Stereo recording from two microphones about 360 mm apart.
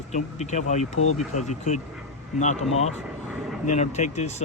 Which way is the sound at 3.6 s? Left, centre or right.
Centre.